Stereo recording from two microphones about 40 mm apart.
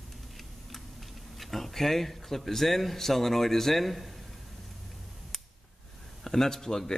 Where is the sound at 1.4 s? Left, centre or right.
Centre.